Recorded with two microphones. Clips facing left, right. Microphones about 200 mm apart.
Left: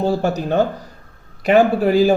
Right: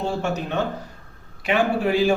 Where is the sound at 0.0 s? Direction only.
35° left (ahead or behind).